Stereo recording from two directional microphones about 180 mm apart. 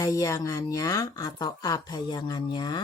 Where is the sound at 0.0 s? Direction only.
20° left (ahead or behind).